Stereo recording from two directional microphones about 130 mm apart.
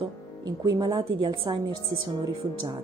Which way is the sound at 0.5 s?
30° right (ahead or behind).